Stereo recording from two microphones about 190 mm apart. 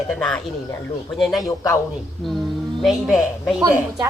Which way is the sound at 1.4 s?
20° left (ahead or behind).